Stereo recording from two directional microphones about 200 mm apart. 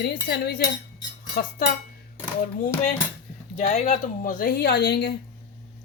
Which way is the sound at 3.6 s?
35° left (ahead or behind).